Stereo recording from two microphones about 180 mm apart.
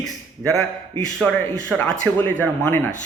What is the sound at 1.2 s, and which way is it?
Speech, 10° left (ahead or behind).